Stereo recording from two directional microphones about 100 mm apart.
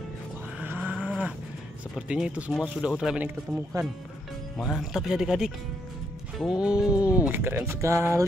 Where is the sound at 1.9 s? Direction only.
5° right (ahead or behind).